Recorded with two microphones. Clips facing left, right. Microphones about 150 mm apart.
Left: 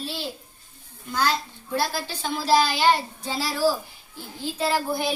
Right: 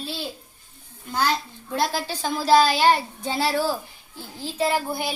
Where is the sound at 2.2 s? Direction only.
45° right (ahead or behind).